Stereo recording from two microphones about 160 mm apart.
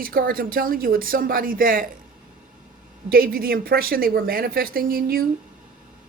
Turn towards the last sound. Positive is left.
turn(degrees=-65)  # may be behind; listen again after turning